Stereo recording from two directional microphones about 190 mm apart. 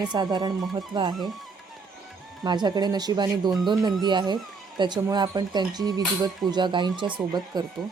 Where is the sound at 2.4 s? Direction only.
25° right (ahead or behind).